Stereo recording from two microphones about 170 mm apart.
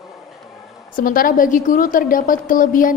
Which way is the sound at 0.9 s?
55° left (ahead or behind).